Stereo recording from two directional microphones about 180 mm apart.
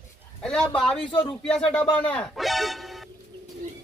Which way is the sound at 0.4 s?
5° left (ahead or behind).